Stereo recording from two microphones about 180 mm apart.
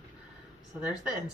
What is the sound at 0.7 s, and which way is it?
Speech, 5° right (ahead or behind).